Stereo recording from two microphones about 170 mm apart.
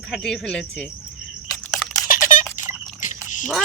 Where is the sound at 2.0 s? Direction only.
50° left (ahead or behind).